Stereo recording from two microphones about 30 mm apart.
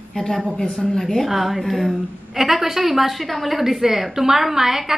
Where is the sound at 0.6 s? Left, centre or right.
Centre.